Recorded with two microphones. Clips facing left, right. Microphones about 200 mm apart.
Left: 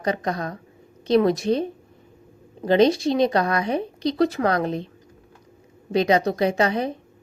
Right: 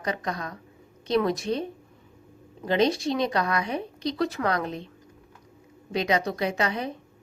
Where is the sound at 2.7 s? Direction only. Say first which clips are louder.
Left 6 dB; 35° left (ahead or behind).